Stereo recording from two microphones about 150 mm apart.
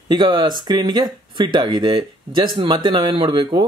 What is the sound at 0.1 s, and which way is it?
Speech, 30° right (ahead or behind).